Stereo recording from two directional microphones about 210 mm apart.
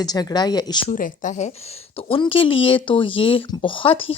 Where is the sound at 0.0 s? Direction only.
20° left (ahead or behind).